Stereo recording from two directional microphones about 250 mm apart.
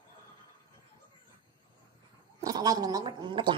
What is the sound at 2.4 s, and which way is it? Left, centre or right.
Speech, centre.